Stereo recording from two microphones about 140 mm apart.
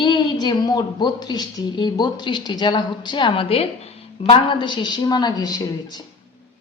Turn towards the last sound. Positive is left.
turn(degrees=30)  # may be behind; listen again after turning